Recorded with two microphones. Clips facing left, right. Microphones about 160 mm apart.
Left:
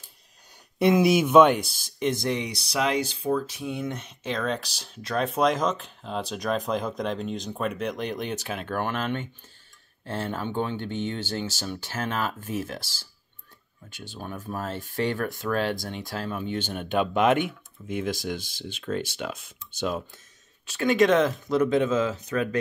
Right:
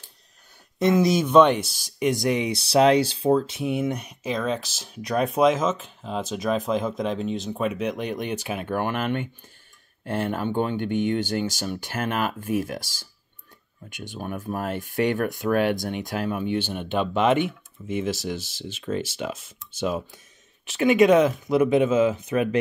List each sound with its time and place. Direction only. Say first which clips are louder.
0.7 s speech: even; 10° left (ahead or behind); by 16.7 s 10° right (ahead or behind)
16.7 s speech: even; centre (ahead or behind); by 22.6 s 15° right (ahead or behind)